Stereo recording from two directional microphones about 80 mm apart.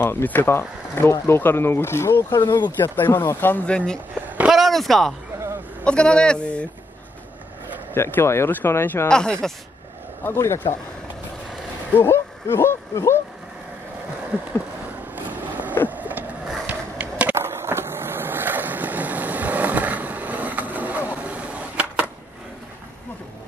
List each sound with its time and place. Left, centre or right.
0.0 s speech: left
2.3 s speech: left
2.8 s speech: left
3.7 s speech: centre
4.5 s a sound: centre
5.9 s speech: centre
7.9 s speech: left
9.1 s speech: centre
10.2 s speech: left
12.0 s a sound: left
15.9 s vehicle: right
16.6 s a sound: centre
17.4 s vehicle: right; by 22.0 s centre